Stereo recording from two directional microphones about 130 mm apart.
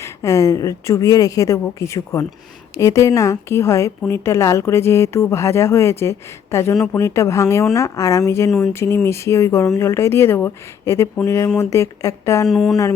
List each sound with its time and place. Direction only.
0.0 s a woman's voice: 25° left (ahead or behind)
12.5 s speech: centre (ahead or behind)